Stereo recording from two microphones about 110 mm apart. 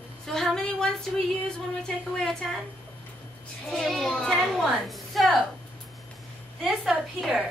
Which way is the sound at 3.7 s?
Centre (ahead or behind).